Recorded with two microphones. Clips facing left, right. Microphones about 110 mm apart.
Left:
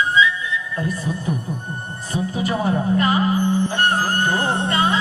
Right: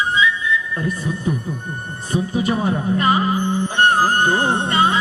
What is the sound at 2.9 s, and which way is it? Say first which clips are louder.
Music: right 2 dB; 25° right (ahead or behind).